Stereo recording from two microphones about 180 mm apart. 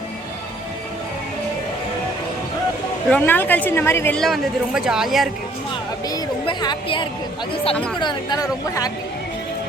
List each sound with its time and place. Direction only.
3.1 s a woman's voice: 10° left (ahead or behind)
6.1 s a woman's voice: 25° left (ahead or behind)